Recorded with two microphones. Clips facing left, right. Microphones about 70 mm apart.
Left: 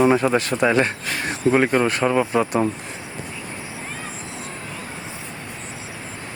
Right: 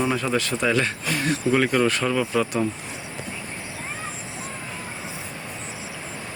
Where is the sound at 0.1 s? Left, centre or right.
Left.